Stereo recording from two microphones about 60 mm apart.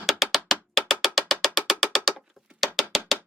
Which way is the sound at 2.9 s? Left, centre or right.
Centre.